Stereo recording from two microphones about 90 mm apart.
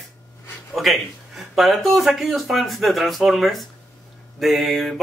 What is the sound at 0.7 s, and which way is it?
Speech, centre (ahead or behind).